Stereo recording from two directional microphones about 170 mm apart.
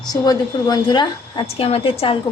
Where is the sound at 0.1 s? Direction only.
25° left (ahead or behind).